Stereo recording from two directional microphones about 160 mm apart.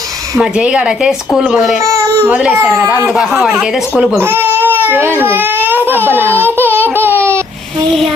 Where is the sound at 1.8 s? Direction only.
20° right (ahead or behind).